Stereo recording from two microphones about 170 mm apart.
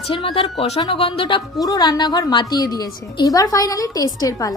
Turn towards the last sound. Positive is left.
turn(degrees=20)  # may be behind; listen again after turning